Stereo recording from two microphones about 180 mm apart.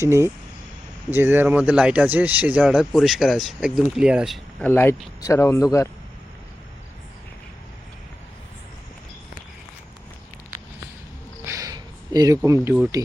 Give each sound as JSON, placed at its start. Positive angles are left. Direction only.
{"t": 0.0, "sound": "speech", "side_deg": -15}
{"t": 4.6, "sound": "speech", "side_deg": 10}
{"t": 11.4, "sound": "a sound", "side_deg": -20}